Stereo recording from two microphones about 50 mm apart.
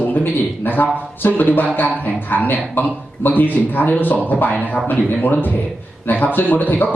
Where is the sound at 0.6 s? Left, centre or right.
Left.